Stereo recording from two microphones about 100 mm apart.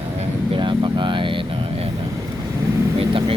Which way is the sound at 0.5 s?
50° right (ahead or behind).